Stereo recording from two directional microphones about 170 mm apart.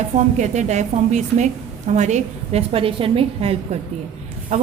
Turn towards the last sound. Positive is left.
turn(degrees=-45)  # may be behind; listen again after turning